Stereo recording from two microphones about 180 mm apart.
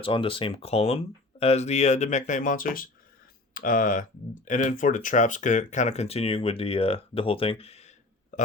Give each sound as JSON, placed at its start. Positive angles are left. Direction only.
{"t": 0.0, "sound": "speech", "side_deg": 30}
{"t": 8.3, "sound": "burping", "side_deg": 45}